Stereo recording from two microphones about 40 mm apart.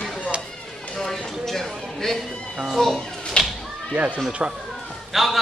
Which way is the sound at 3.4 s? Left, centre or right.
Left.